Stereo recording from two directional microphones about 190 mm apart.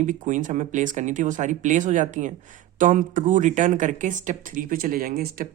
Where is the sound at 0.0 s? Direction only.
40° right (ahead or behind).